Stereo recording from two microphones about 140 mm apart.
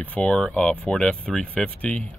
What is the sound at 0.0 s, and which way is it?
Speech, 10° left (ahead or behind).